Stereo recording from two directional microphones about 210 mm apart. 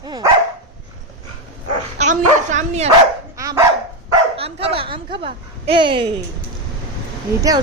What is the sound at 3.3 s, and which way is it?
Dog, 15° right (ahead or behind).